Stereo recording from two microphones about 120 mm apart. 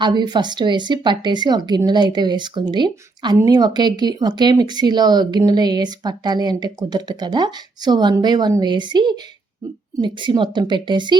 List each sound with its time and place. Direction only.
0.0 s speech: 35° right (ahead or behind)